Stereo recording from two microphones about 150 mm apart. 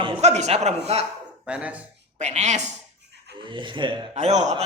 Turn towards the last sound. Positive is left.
turn(degrees=-50)  # may be behind; listen again after turning